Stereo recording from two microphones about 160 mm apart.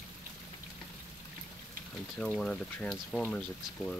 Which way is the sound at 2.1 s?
5° left (ahead or behind).